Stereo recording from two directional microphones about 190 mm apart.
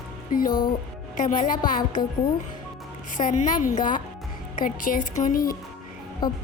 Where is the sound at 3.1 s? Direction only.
45° left (ahead or behind).